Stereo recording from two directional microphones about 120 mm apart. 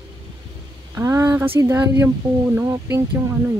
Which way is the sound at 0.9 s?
25° right (ahead or behind).